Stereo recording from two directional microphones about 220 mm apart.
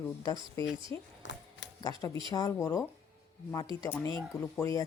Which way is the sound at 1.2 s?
55° left (ahead or behind).